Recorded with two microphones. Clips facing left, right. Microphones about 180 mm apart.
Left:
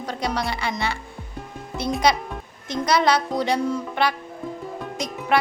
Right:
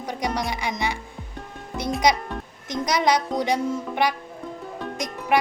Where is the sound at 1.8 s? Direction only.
15° right (ahead or behind).